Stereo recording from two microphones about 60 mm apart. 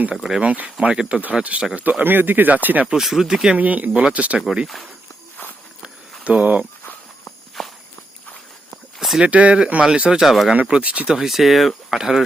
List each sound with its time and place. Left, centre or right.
0.1 s speech: centre
0.4 s speech: right
2.8 s speech: centre
3.6 s speech: right
4.4 s speech: centre
6.2 s speech: right
7.6 s walk: centre
9.0 s a sound: centre
9.2 s speech: right; by 10.5 s centre
10.5 s speech: right
11.1 s speech: centre